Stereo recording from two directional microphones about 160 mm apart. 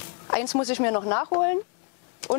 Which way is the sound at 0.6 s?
15° left (ahead or behind).